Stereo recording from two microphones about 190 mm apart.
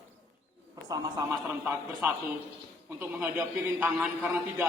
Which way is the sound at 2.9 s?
10° right (ahead or behind).